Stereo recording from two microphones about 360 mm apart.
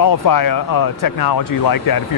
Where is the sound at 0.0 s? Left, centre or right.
Left.